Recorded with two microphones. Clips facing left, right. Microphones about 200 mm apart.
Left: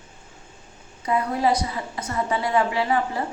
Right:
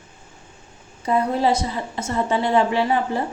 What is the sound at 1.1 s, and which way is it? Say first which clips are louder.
A woman's voice: right 2 dB; 30° right (ahead or behind).